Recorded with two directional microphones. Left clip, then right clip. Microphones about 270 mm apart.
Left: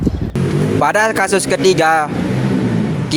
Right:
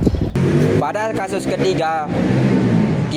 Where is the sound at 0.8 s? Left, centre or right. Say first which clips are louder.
Left 7 dB; left.